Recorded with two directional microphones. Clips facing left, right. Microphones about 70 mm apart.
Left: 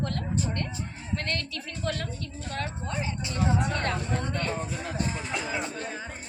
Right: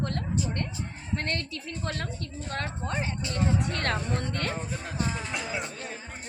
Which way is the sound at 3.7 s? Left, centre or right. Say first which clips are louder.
Even; right.